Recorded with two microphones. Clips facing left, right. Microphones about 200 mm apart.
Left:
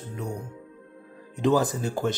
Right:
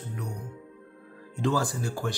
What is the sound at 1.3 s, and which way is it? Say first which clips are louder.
Speech: left 5 dB; 20° left (ahead or behind).